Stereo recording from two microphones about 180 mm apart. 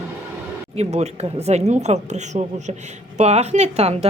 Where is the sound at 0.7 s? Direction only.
35° right (ahead or behind).